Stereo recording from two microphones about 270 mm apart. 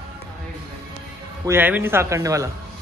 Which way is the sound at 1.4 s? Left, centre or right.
Centre.